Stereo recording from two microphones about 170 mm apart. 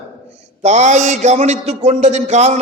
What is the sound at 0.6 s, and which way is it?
A man's voice, 40° right (ahead or behind).